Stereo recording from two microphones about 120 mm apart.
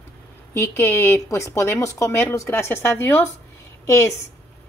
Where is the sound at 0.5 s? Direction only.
20° left (ahead or behind).